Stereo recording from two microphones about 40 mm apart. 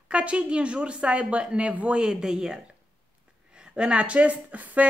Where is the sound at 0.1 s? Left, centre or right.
Right.